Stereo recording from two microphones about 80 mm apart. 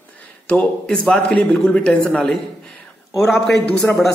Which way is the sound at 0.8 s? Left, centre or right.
Centre.